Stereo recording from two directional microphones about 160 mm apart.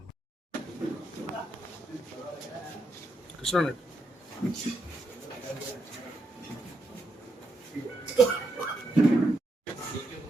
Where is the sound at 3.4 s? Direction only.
Centre (ahead or behind).